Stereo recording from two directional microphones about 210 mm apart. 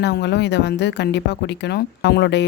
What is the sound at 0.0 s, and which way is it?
Speech, 55° left (ahead or behind).